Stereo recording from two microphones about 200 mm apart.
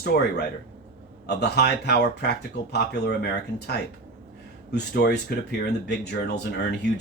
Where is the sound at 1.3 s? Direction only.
55° left (ahead or behind).